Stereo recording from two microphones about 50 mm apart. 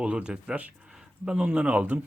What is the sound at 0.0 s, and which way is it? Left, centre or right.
Speech, right.